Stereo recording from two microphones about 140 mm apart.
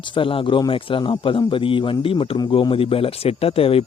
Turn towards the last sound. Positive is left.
turn(degrees=45)  # may be behind; listen again after turning